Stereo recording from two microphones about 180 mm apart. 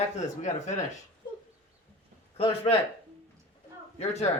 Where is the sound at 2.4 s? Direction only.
35° left (ahead or behind).